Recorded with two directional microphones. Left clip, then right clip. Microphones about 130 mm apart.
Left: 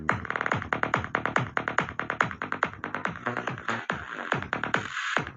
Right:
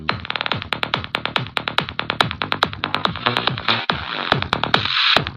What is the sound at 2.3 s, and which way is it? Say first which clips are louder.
Music: right 9 dB; 20° right (ahead or behind).